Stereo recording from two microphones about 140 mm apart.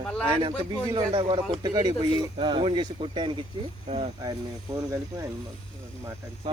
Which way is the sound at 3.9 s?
50° right (ahead or behind).